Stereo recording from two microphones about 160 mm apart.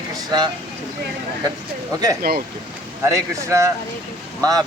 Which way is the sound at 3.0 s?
20° right (ahead or behind).